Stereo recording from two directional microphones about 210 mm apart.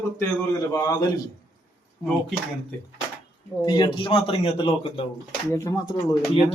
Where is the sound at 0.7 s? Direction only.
15° left (ahead or behind).